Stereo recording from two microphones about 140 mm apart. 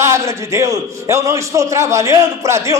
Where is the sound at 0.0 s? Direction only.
20° right (ahead or behind).